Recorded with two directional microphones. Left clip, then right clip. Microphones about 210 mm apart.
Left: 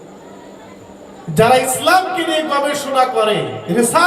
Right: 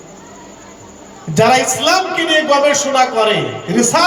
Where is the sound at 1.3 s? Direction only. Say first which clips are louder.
Right 1 dB; 50° right (ahead or behind).